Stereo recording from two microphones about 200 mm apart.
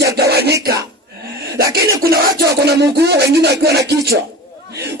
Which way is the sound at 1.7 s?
50° right (ahead or behind).